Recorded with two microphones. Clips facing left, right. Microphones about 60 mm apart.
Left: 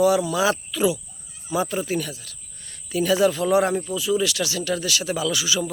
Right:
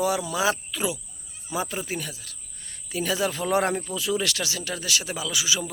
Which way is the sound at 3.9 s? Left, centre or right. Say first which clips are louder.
Left 4 dB; right.